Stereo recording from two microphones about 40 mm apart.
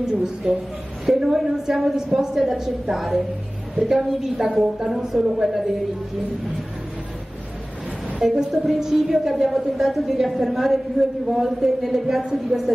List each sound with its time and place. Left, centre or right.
0.0 s a woman's voice: centre
8.2 s a woman's voice: centre